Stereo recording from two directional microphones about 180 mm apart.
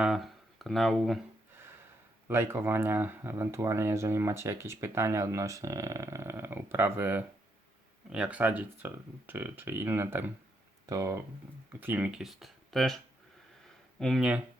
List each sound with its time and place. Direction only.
0.0 s speech: centre (ahead or behind)
2.2 s speech: 15° right (ahead or behind)
14.0 s speech: centre (ahead or behind)